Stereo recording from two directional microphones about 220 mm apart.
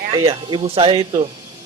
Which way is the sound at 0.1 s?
20° right (ahead or behind).